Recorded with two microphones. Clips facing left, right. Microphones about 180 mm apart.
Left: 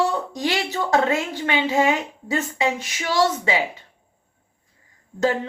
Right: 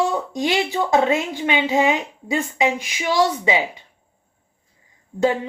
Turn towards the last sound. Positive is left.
turn(degrees=-15)  # may be behind; listen again after turning